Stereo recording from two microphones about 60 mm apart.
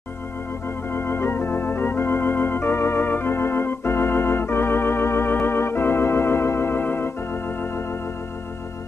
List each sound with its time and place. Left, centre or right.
0.9 s organ: left